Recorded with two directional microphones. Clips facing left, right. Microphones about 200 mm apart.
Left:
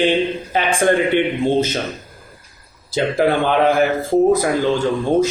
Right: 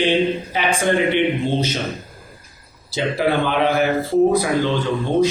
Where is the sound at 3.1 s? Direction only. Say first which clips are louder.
Left 3 dB; 50° left (ahead or behind).